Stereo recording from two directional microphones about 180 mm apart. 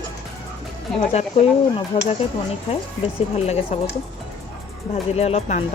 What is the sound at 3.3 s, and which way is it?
Speech, 35° left (ahead or behind).